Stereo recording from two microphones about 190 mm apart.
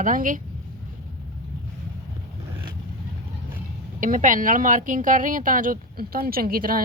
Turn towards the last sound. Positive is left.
turn(degrees=-50)  # may be behind; listen again after turning